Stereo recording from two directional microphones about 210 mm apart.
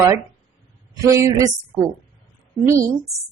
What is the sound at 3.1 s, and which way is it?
Speech, 15° right (ahead or behind).